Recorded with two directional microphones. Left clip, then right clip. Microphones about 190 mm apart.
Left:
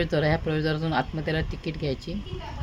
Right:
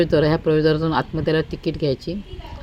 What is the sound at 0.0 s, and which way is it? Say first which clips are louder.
Speech: right 7 dB; 15° right (ahead or behind).